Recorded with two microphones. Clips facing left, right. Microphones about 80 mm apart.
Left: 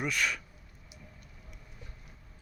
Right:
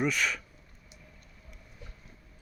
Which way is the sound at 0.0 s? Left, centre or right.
Centre.